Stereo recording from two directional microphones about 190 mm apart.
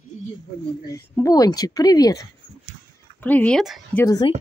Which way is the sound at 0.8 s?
15° left (ahead or behind).